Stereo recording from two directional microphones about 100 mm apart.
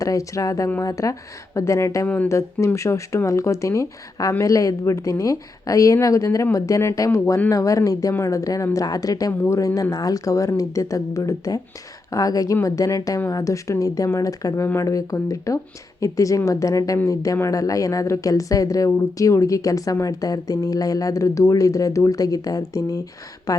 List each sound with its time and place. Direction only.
0.0 s a woman's voice: 35° left (ahead or behind)
2.0 s speech: 15° left (ahead or behind)
2.3 s a woman's voice: 30° left (ahead or behind)